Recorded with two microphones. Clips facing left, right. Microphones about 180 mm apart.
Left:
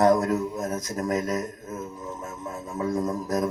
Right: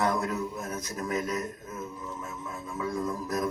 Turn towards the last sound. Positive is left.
turn(degrees=40)  # may be behind; listen again after turning